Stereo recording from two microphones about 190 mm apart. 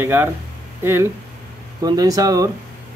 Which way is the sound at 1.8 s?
20° right (ahead or behind).